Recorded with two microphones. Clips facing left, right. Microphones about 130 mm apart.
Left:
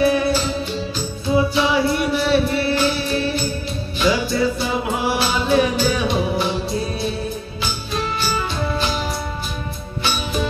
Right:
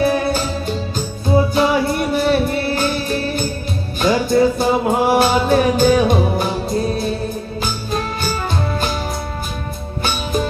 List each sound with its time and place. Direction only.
0.0 s music: 45° right (ahead or behind)
7.9 s music: 45° right (ahead or behind)